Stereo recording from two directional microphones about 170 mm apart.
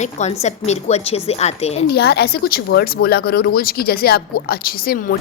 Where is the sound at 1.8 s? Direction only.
75° left (ahead or behind).